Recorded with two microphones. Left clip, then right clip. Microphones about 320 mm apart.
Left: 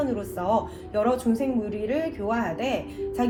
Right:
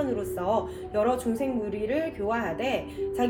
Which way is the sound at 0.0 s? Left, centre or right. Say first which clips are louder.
Left 1 dB; centre.